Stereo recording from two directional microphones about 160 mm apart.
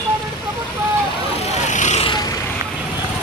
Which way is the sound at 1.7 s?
45° left (ahead or behind).